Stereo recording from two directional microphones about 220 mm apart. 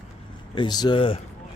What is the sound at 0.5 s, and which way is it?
Speech, 20° left (ahead or behind).